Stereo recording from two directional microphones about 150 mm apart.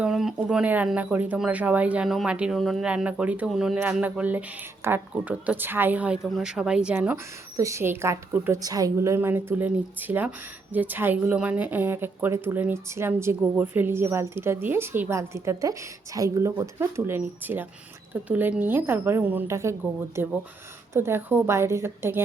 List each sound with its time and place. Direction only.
0.0 s a woman's voice: 5° right (ahead or behind)
7.5 s a woman's voice: 20° right (ahead or behind)